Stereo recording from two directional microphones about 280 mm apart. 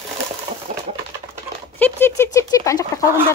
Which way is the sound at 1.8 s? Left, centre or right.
Centre.